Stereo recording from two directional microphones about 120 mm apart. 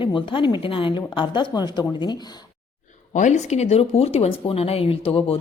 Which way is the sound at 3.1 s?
85° left.